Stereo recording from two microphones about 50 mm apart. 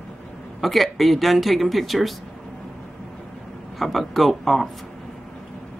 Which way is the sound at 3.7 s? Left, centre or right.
Centre.